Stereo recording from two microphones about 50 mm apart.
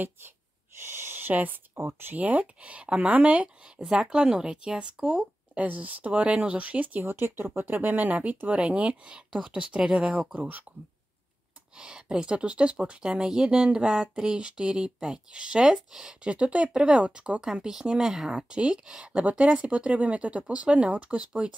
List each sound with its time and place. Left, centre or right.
0.8 s a sound: right
1.8 s speech: right
2.1 s speech: right
7.0 s speech: right; by 9.9 s centre
10.3 s speech: right
11.7 s speech: centre
13.7 s speech: centre
16.3 s speech: right
17.4 s speech: centre
18.3 s speech: centre